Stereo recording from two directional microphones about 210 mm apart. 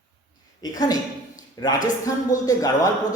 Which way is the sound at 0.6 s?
15° left (ahead or behind).